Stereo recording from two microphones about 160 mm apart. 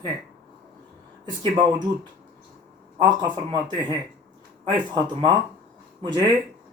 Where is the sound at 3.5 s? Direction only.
30° right (ahead or behind).